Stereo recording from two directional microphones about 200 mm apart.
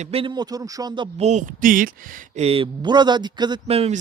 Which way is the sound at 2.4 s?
30° right (ahead or behind).